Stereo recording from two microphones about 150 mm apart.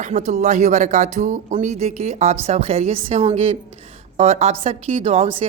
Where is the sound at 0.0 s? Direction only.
50° right (ahead or behind).